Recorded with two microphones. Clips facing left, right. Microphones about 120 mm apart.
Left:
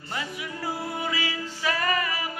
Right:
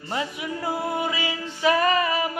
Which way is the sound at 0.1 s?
25° right (ahead or behind).